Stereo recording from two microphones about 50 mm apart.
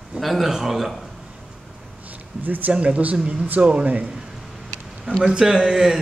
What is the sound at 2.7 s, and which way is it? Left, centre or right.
Speech, right.